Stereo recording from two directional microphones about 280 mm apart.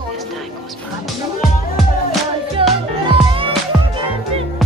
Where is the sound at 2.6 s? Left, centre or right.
Centre.